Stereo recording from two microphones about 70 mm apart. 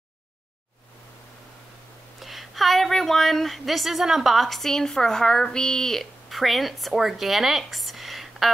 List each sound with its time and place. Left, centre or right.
2.1 s a woman's voice: centre